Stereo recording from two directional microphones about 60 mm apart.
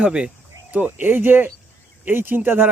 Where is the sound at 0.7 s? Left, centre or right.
Right.